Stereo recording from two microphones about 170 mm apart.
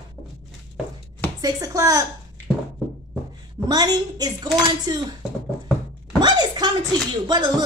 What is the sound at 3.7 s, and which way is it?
A woman's voice, 25° right (ahead or behind).